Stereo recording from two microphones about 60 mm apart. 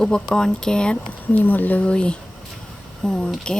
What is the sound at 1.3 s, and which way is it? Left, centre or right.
Speech, left.